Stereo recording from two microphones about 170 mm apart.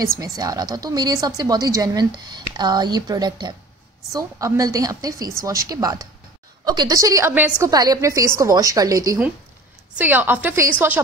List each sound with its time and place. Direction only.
0.2 s speech: 20° right (ahead or behind)
7.7 s a woman's voice: 20° right (ahead or behind)